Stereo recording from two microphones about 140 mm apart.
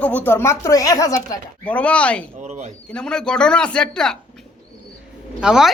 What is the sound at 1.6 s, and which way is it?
Speech, 10° left (ahead or behind).